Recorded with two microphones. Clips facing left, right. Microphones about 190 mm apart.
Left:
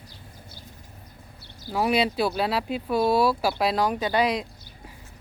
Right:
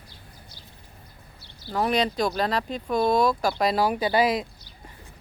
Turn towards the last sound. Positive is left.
turn(degrees=-5)  # may be behind; listen again after turning